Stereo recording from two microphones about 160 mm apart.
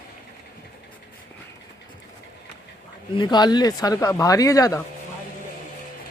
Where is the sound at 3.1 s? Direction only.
25° left (ahead or behind).